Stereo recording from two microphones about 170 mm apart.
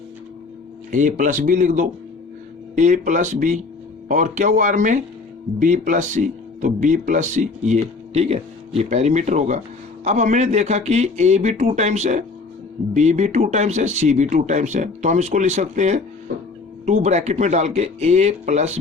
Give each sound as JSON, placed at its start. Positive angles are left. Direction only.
{"t": 0.9, "sound": "speech", "side_deg": -50}